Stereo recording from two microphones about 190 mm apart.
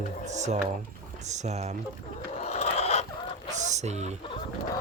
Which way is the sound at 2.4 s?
35° left (ahead or behind).